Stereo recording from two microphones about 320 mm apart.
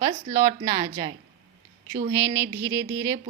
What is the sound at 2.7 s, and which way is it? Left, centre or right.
Speech, right.